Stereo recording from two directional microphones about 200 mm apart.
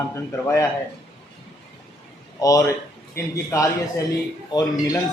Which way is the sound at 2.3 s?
15° left (ahead or behind).